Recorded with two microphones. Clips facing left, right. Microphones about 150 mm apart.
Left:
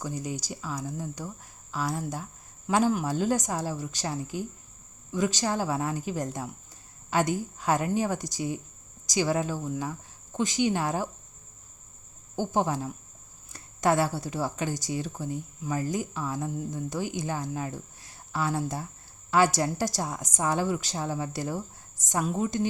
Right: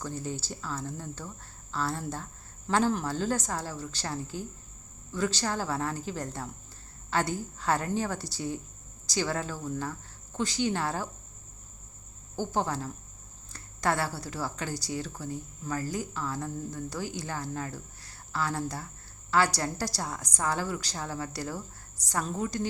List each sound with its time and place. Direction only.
0.0 s speech: 15° left (ahead or behind)
12.4 s speech: 15° left (ahead or behind)